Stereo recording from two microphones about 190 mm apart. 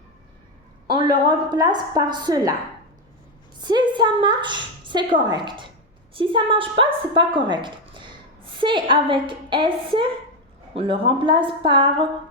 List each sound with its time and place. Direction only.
0.9 s a woman's voice: 25° right (ahead or behind)
3.6 s a woman's voice: 25° right (ahead or behind)